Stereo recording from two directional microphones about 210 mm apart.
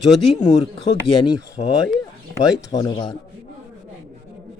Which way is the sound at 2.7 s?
20° left (ahead or behind).